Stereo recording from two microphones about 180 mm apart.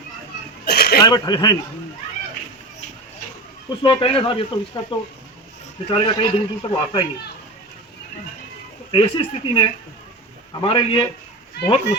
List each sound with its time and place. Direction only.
0.6 s a sound: 65° left (ahead or behind)
1.0 s speech: 20° left (ahead or behind)
3.7 s speech: 30° left (ahead or behind)
8.9 s speech: 30° left (ahead or behind)